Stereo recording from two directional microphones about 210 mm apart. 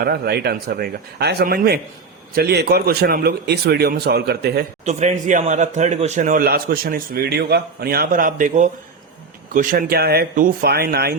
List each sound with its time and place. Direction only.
0.0 s a man's voice: 50° right (ahead or behind)
4.9 s a man's voice: 35° right (ahead or behind)